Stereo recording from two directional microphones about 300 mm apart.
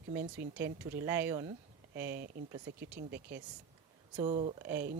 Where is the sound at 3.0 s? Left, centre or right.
Right.